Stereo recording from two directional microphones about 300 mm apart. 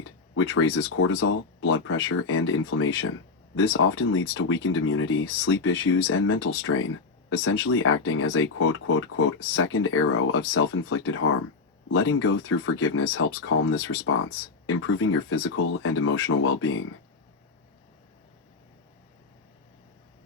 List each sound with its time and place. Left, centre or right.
0.5 s speech: left